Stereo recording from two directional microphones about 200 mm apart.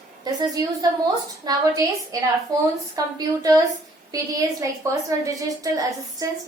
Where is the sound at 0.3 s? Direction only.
20° right (ahead or behind).